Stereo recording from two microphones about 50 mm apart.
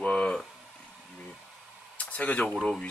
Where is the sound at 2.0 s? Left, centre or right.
Left.